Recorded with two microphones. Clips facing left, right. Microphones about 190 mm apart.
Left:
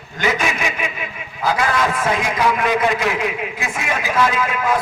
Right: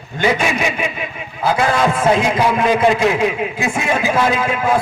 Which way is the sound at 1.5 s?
30° right (ahead or behind).